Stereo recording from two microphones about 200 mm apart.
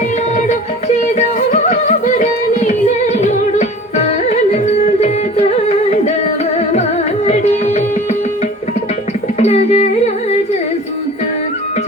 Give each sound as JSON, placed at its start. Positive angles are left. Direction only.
{"t": 1.4, "sound": "music", "side_deg": 35}
{"t": 7.3, "sound": "carnatic music", "side_deg": 35}
{"t": 9.4, "sound": "music", "side_deg": 35}